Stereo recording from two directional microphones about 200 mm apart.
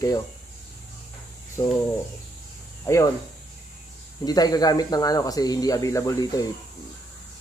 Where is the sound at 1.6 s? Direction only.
15° left (ahead or behind).